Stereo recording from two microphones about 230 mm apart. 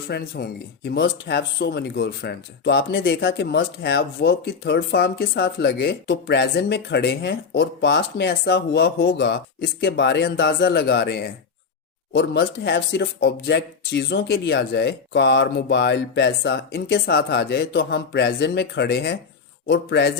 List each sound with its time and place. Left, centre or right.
0.1 s speech: left